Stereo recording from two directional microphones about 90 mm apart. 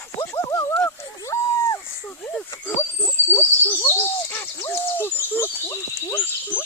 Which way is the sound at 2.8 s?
30° left (ahead or behind).